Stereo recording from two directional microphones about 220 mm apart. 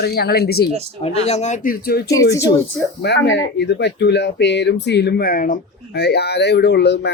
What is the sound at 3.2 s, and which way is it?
Speech, 50° left (ahead or behind).